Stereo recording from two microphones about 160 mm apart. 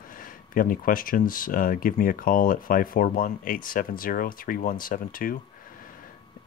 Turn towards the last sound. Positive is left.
turn(degrees=60)  # may be behind; listen again after turning